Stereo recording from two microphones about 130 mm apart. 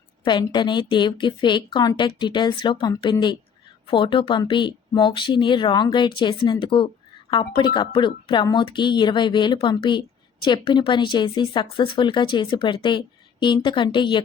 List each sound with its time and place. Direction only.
0.3 s speech: 35° left (ahead or behind)